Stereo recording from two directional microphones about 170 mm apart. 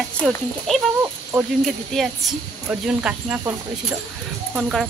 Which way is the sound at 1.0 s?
15° right (ahead or behind).